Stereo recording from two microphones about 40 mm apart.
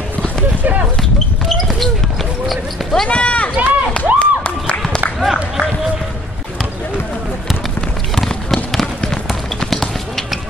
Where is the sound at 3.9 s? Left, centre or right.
Left.